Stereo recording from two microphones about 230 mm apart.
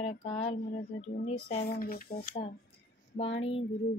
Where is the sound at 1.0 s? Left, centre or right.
Left.